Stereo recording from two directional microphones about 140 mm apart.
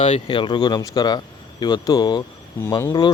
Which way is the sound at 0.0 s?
40° left (ahead or behind).